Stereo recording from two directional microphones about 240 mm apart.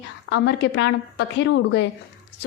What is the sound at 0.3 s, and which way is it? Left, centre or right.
A woman's voice, left.